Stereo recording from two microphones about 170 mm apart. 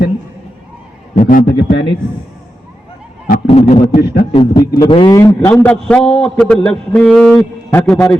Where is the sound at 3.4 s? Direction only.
40° left (ahead or behind).